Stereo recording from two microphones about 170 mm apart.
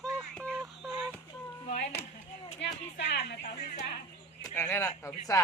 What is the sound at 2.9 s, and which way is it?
Speech, 90° left.